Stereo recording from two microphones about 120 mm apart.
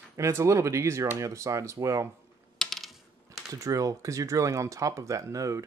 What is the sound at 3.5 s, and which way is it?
Speech, 30° right (ahead or behind).